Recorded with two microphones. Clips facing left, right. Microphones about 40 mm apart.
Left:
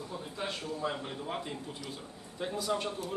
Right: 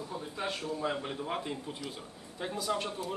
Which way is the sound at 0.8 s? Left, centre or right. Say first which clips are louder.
Right 1 dB; centre.